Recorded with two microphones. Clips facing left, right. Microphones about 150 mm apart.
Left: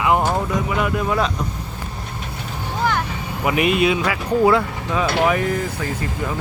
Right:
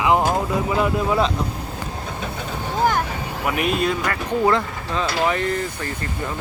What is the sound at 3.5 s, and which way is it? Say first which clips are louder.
Speech: left 4 dB; 5° left (ahead or behind).